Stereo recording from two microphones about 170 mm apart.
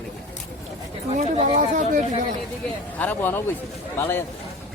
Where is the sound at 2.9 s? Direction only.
10° left (ahead or behind).